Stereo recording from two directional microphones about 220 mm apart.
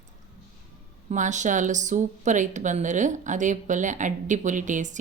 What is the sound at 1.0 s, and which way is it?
Speech, 35° right (ahead or behind).